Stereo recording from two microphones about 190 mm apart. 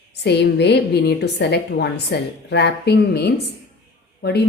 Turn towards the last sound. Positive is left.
turn(degrees=60)  # may be behind; listen again after turning